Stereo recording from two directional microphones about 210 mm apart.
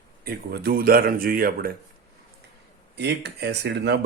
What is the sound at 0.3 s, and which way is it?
Speech, 45° right (ahead or behind).